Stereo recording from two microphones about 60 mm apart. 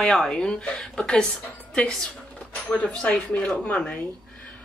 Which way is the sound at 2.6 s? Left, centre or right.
Centre.